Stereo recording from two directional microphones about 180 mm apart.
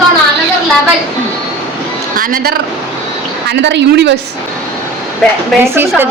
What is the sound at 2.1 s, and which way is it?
Speech, 50° right (ahead or behind).